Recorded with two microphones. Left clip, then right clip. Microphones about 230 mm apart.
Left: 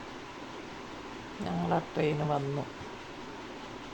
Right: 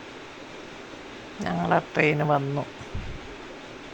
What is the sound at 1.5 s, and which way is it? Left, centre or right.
Speech, centre.